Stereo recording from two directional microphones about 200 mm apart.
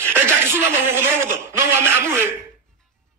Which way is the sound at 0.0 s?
10° right (ahead or behind).